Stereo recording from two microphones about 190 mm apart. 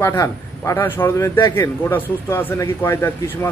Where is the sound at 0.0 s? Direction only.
15° left (ahead or behind).